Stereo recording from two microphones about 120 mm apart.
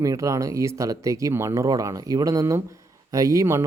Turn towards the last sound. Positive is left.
turn(degrees=-25)  # may be behind; listen again after turning